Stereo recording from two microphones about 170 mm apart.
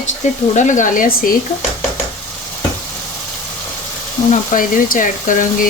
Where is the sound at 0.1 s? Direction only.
45° left (ahead or behind).